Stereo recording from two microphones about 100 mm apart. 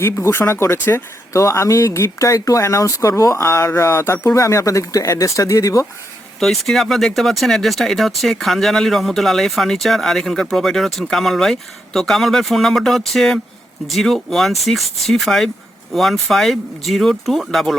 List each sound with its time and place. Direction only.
0.0 s speech: 25° left (ahead or behind)
6.4 s speech: 5° left (ahead or behind)